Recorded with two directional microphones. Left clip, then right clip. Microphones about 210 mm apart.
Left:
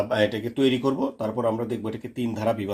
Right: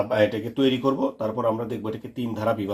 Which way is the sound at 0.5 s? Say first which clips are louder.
Right 1 dB; 30° left (ahead or behind).